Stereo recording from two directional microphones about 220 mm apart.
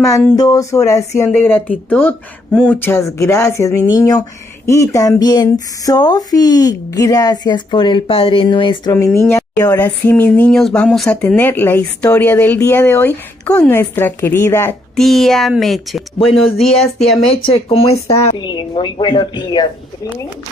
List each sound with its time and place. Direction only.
0.0 s speech: 15° left (ahead or behind)
17.5 s speech: 25° left (ahead or behind)